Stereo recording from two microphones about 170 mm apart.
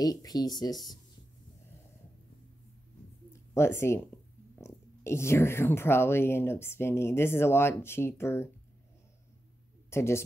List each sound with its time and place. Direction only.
0.0 s speech: 20° left (ahead or behind)
3.3 s speech: 15° left (ahead or behind)
9.8 s a woman's voice: 15° left (ahead or behind)